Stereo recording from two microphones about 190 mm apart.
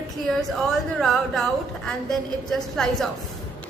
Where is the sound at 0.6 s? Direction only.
Centre (ahead or behind).